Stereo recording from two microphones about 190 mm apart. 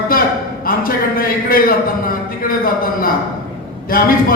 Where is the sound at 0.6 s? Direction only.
50° left (ahead or behind).